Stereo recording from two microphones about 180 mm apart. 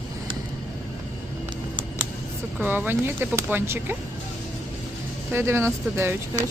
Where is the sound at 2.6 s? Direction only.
10° right (ahead or behind).